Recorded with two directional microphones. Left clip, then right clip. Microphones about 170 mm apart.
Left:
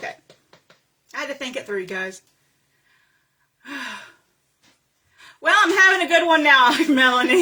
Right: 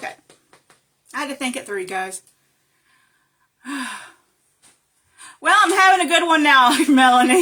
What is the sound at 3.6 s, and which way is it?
Gasp, 35° right (ahead or behind).